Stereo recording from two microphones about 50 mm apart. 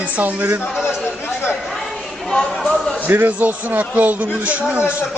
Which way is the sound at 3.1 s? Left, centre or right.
Right.